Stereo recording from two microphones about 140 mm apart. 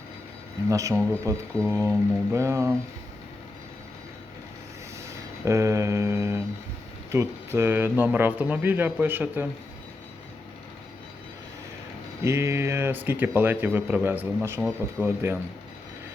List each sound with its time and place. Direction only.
0.7 s speech: 25° right (ahead or behind)
1.5 s speech: 10° left (ahead or behind)
2.3 s speech: 20° right (ahead or behind)
5.5 s mantra: 20° right (ahead or behind)
7.1 s speech: 20° right (ahead or behind)
12.2 s speech: 20° right (ahead or behind)